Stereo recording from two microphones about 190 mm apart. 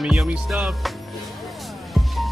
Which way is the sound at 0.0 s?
Centre (ahead or behind).